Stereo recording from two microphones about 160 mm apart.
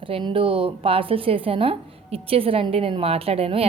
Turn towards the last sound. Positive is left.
turn(degrees=-40)  # may be behind; listen again after turning